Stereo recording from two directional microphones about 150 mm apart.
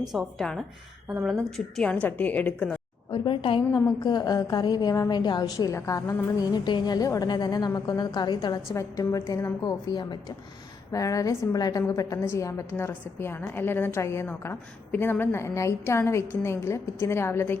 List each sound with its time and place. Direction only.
0.1 s a woman's voice: centre (ahead or behind)
3.1 s a woman's voice: 35° left (ahead or behind); by 17.6 s 15° left (ahead or behind)